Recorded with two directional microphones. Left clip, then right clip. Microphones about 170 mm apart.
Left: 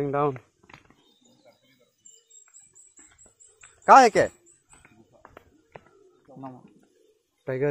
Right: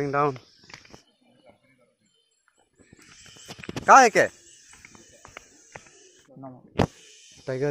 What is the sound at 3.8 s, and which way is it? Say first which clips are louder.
Speech: even; 10° left (ahead or behind).